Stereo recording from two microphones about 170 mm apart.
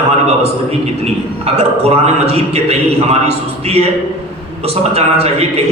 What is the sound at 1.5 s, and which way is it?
A man's voice, 35° right (ahead or behind).